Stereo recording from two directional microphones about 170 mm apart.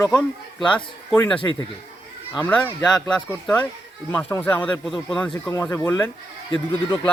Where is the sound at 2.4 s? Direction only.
10° left (ahead or behind).